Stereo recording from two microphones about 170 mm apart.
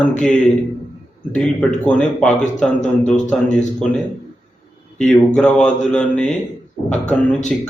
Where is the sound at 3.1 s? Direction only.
45° left (ahead or behind).